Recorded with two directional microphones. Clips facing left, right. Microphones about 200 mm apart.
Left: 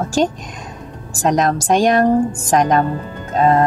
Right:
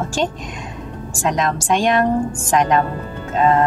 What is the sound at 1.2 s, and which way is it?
Speech, 40° left (ahead or behind).